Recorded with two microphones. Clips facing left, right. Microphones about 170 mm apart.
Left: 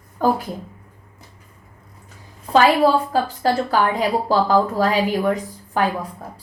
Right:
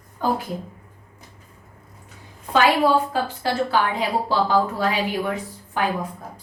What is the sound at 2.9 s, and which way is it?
A woman's voice, 40° left (ahead or behind).